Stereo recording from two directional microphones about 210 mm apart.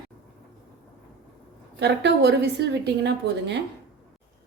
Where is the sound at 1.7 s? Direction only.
50° right (ahead or behind).